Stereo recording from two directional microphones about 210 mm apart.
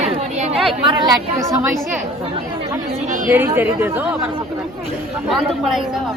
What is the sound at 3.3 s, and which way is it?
Speech, 10° right (ahead or behind).